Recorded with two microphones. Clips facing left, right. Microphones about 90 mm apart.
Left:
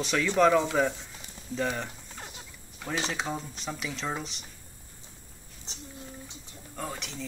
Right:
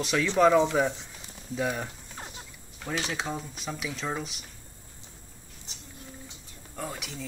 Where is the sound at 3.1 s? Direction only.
Centre (ahead or behind).